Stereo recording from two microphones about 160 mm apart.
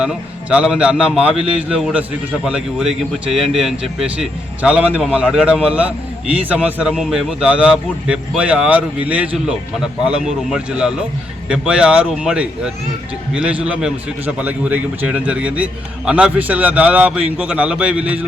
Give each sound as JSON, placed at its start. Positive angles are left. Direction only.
{"t": 0.0, "sound": "a man's voice", "side_deg": -5}